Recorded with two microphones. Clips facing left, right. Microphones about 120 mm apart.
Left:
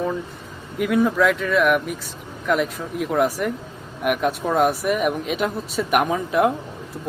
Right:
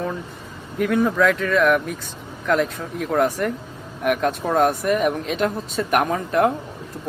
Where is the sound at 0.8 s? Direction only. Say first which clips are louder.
Even; 5° left (ahead or behind).